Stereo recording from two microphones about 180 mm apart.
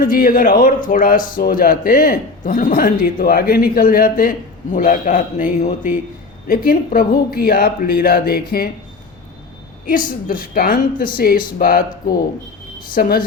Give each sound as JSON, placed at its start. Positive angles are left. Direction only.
{"t": 0.0, "sound": "a man's voice", "side_deg": 50}
{"t": 6.5, "sound": "speech", "side_deg": 55}
{"t": 9.8, "sound": "a man's voice", "side_deg": 50}